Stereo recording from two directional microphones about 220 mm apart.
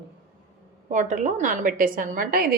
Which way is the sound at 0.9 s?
35° right (ahead or behind).